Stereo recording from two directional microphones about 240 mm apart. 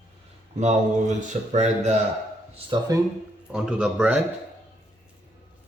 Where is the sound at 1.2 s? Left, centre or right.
Right.